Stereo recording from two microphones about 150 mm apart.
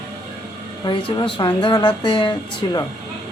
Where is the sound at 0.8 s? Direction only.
35° left (ahead or behind).